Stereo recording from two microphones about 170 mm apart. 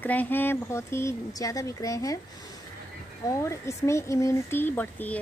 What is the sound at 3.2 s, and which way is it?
Speech, 15° left (ahead or behind).